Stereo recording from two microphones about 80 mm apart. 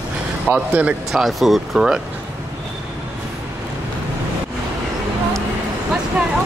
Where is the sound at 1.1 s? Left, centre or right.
Centre.